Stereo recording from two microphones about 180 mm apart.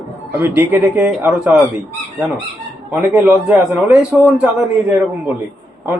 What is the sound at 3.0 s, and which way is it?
A man's voice, 10° right (ahead or behind).